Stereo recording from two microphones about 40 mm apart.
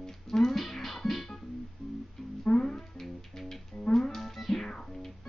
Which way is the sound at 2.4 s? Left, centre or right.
Centre.